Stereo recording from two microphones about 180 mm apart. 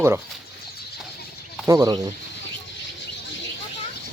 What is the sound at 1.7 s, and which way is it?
Speech, 20° right (ahead or behind).